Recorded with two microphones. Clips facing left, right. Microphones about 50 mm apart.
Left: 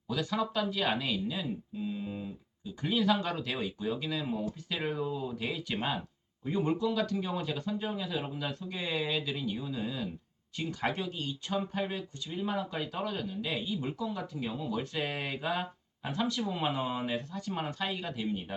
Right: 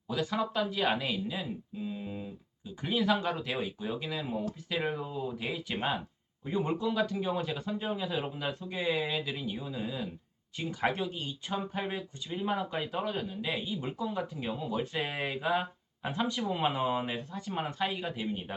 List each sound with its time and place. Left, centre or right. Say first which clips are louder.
0.1 s speech: even; centre